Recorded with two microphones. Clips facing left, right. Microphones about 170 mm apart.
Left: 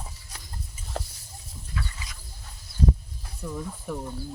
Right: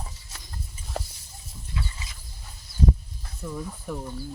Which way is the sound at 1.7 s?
25° right (ahead or behind).